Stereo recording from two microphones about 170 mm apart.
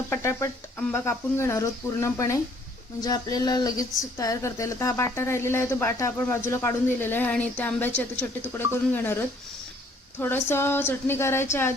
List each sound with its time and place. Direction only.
0.1 s speech: 15° left (ahead or behind)